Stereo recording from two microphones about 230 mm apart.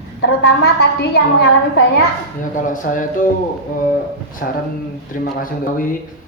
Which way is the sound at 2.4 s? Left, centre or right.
Left.